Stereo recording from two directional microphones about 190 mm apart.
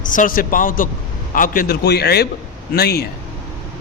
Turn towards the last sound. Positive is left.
turn(degrees=55)  # may be behind; listen again after turning